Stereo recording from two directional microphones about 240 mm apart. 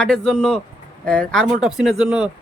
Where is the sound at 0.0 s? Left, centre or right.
Centre.